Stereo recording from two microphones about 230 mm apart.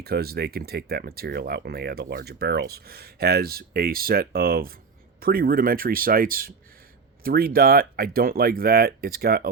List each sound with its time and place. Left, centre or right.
0.0 s speech: right